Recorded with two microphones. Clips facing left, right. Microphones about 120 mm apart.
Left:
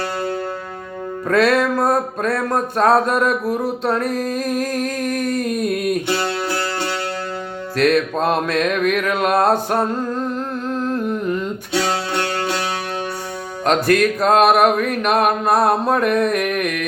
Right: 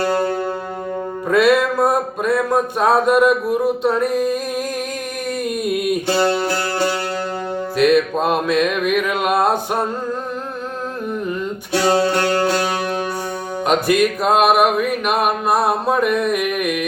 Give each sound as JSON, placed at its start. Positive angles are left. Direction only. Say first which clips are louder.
{"t": 1.3, "sound": "music", "louder": "right 1 dB", "side_deg": -10}
{"t": 4.1, "sound": "a sound", "louder": "right 2 dB", "side_deg": -10}
{"t": 7.8, "sound": "music", "louder": "right 1 dB", "side_deg": -5}
{"t": 11.7, "sound": "speech", "louder": "right 5 dB", "side_deg": -50}
{"t": 13.7, "sound": "music", "louder": "left 1 dB", "side_deg": -10}